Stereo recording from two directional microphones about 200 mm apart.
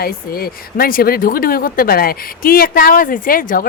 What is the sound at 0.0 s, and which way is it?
A woman's voice, 45° left (ahead or behind).